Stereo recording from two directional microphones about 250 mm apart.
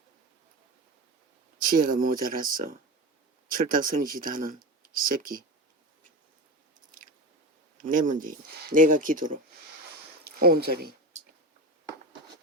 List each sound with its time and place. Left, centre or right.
1.6 s speech: right
7.8 s speech: right